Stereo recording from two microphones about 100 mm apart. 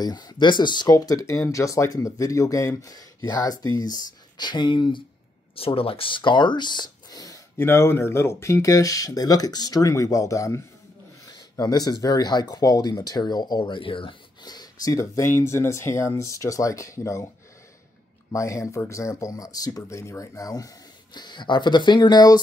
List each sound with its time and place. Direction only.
0.0 s speech: 45° left (ahead or behind)
0.9 s speech: 35° left (ahead or behind); by 5.0 s 55° left (ahead or behind)
5.6 s speech: 70° left (ahead or behind); by 7.4 s 40° left (ahead or behind)
7.5 s speech: 25° left (ahead or behind); by 14.1 s 60° left (ahead or behind)
14.4 s speech: 40° left (ahead or behind)
18.3 s speech: 30° left (ahead or behind)